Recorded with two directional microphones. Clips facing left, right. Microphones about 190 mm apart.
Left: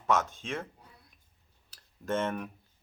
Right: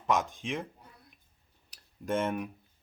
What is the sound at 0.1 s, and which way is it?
Speech, 15° right (ahead or behind).